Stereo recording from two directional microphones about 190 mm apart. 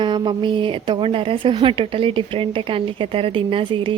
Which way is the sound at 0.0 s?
25° right (ahead or behind).